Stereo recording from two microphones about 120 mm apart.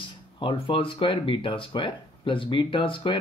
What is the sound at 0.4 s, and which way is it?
Speech, 45° left (ahead or behind).